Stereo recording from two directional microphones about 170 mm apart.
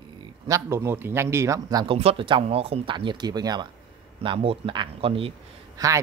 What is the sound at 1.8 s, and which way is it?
Speech, 35° right (ahead or behind).